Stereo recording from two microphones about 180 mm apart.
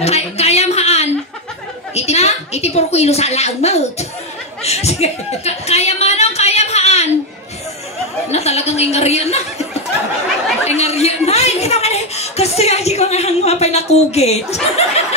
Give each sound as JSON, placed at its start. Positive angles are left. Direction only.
{"t": 0.0, "sound": "a woman's voice", "side_deg": 35}
{"t": 8.3, "sound": "speech", "side_deg": 35}